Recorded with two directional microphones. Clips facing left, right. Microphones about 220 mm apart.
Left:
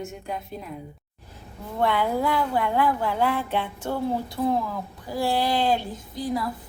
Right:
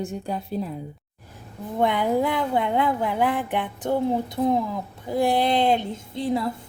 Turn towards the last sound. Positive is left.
turn(degrees=-25)  # may be behind; listen again after turning